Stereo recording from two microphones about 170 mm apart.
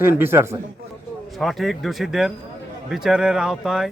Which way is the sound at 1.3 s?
Centre (ahead or behind).